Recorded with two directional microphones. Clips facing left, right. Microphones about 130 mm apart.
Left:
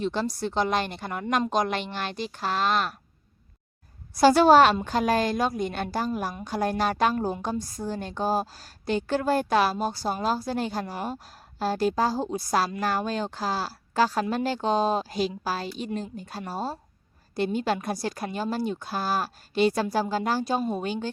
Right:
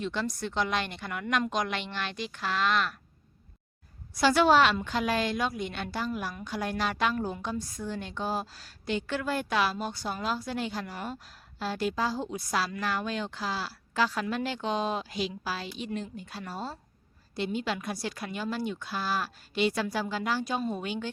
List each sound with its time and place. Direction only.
0.0 s a woman's voice: 35° left (ahead or behind)
4.1 s a woman's voice: 40° left (ahead or behind)